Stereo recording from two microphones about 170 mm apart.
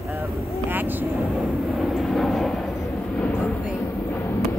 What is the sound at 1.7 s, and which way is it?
Vehicle, centre (ahead or behind).